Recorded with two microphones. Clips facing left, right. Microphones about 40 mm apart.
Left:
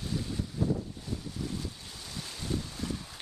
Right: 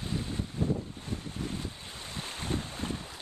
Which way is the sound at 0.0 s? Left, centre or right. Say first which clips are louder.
Even; right.